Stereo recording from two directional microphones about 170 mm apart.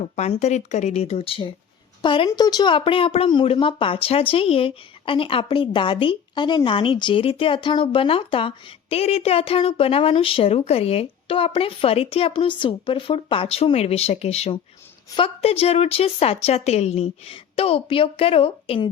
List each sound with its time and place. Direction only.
0.0 s speech: 40° left (ahead or behind)